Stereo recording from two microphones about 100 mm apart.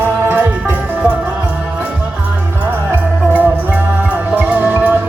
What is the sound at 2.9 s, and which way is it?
Music, 15° right (ahead or behind).